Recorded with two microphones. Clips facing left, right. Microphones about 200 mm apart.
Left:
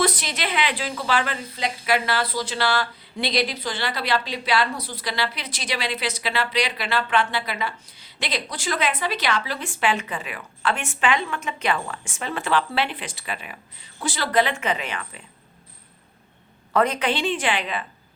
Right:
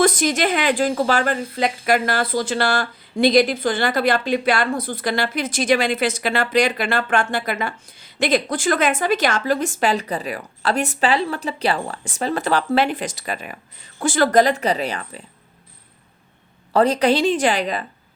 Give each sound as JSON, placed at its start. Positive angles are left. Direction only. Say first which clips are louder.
{"t": 0.0, "sound": "a woman's voice", "louder": "right 7 dB", "side_deg": -45}
{"t": 16.7, "sound": "speech", "louder": "right 6 dB", "side_deg": -35}